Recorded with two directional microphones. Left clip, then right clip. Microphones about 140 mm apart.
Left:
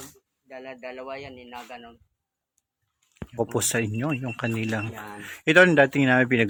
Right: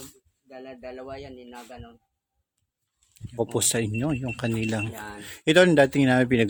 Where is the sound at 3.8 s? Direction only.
40° right (ahead or behind).